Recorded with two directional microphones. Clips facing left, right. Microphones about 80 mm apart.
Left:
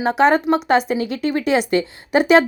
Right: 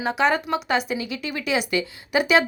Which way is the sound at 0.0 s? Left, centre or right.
Left.